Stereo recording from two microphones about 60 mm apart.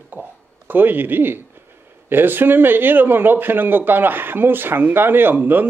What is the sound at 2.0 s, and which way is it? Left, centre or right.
A man's voice, right.